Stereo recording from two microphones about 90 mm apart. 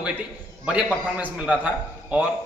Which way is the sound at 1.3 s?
15° right (ahead or behind).